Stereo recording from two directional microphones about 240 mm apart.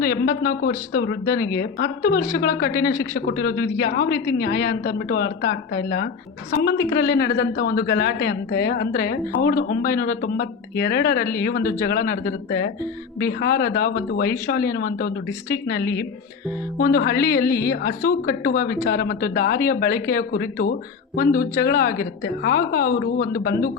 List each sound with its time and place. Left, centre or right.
0.0 s a man's voice: left
15.8 s a woman's voice: centre
16.7 s a man's voice: left
17.4 s a woman's voice: centre
17.7 s a man's voice: left